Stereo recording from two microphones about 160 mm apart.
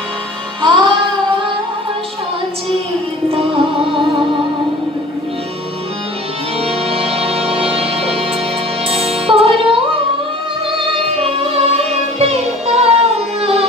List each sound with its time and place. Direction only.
0.6 s music: 30° right (ahead or behind)
6.9 s music: 35° right (ahead or behind)
11.1 s singing: 35° right (ahead or behind)
11.9 s music: 40° right (ahead or behind)